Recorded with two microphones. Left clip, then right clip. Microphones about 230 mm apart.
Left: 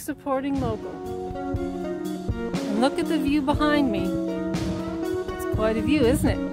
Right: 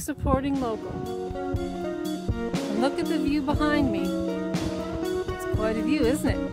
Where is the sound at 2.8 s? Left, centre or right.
Left.